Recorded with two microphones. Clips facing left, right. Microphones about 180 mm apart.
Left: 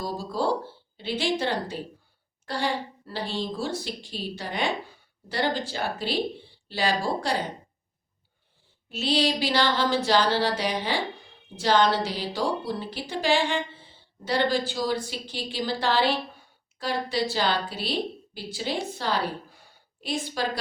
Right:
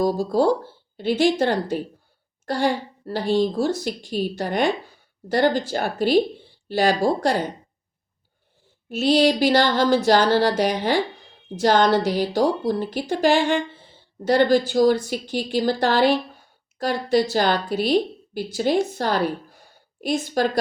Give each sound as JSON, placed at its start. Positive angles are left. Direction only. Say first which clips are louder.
{"t": 0.0, "sound": "a woman's voice", "louder": "right 9 dB", "side_deg": -45}
{"t": 8.9, "sound": "a woman's voice", "louder": "right 7 dB", "side_deg": -45}